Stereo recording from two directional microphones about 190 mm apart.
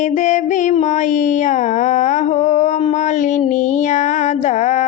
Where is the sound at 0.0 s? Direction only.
40° left (ahead or behind).